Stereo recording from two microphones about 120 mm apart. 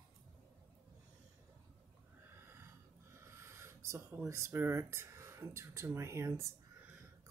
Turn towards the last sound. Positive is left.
turn(degrees=-25)  # may be behind; listen again after turning